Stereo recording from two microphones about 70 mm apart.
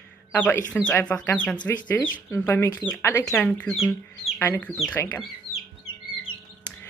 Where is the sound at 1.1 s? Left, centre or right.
Left.